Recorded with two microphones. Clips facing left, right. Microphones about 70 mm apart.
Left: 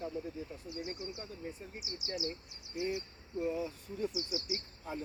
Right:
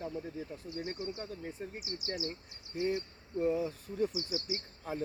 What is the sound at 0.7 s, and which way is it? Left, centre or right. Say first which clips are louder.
Speech: right 4 dB; right.